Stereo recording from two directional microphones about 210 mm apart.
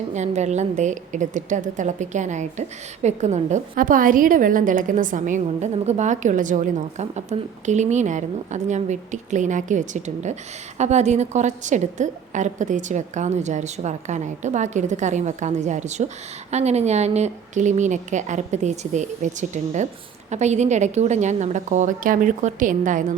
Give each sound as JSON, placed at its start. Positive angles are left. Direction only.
{"t": 0.1, "sound": "a woman's voice", "side_deg": -35}